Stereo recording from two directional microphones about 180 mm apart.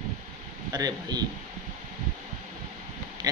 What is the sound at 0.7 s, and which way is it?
Speech, 20° right (ahead or behind).